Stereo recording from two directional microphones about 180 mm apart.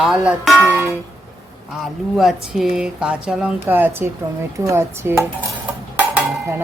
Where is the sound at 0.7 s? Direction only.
10° right (ahead or behind).